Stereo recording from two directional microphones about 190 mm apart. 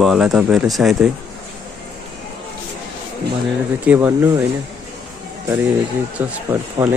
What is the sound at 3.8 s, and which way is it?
Speech, 10° right (ahead or behind).